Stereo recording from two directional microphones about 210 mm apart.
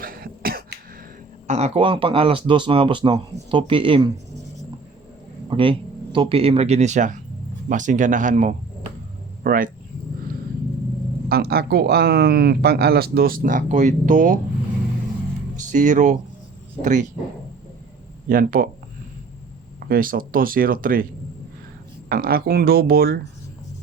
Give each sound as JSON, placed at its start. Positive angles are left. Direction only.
{"t": 0.0, "sound": "cough", "side_deg": -45}
{"t": 1.5, "sound": "speech", "side_deg": -30}
{"t": 5.5, "sound": "speech", "side_deg": -25}
{"t": 11.3, "sound": "speech", "side_deg": -50}
{"t": 15.5, "sound": "speech", "side_deg": -35}
{"t": 18.3, "sound": "speech", "side_deg": -40}
{"t": 19.9, "sound": "speech", "side_deg": -40}
{"t": 22.1, "sound": "speech", "side_deg": -45}